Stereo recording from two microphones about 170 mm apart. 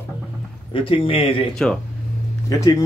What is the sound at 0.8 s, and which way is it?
Speech, 30° left (ahead or behind).